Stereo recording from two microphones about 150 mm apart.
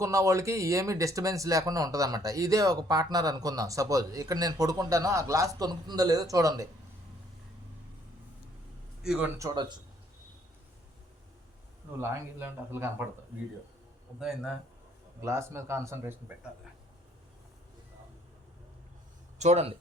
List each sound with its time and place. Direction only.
0.0 s speech: 20° right (ahead or behind)
9.0 s a man's voice: 5° right (ahead or behind)
9.4 s speech: 30° right (ahead or behind)
11.9 s a man's voice: 15° right (ahead or behind)
14.2 s speech: 5° right (ahead or behind)
15.2 s a man's voice: 20° right (ahead or behind)
19.4 s speech: 45° right (ahead or behind)